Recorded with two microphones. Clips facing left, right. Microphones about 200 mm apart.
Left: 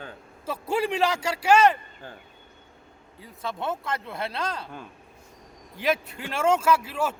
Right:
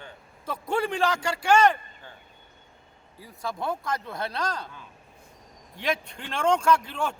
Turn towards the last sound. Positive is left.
turn(degrees=5)  # may be behind; listen again after turning